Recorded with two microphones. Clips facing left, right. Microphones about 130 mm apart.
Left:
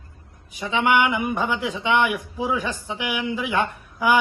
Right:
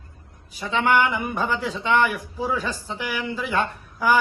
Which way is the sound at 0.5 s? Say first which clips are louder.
Even; 15° left (ahead or behind).